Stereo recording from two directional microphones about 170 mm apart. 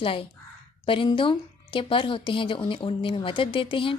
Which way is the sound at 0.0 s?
30° left (ahead or behind).